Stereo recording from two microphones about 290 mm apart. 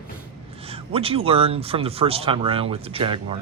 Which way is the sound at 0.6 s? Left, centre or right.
Centre.